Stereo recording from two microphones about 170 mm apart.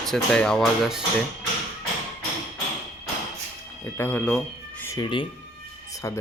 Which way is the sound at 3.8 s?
10° left (ahead or behind).